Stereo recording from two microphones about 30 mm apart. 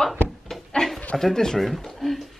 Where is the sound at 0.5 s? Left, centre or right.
Centre.